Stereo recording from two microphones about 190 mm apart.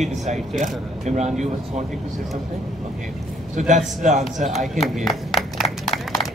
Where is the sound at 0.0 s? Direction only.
40° right (ahead or behind).